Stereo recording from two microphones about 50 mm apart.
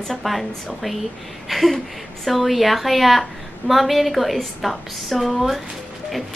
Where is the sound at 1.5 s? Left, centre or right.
Centre.